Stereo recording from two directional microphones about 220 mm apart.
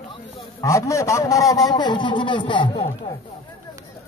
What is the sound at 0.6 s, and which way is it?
A man's voice, 15° left (ahead or behind).